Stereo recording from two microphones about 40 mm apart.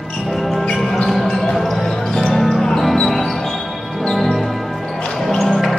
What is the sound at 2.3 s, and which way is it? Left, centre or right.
Music, centre.